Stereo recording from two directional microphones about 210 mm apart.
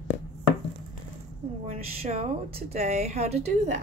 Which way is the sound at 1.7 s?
30° right (ahead or behind).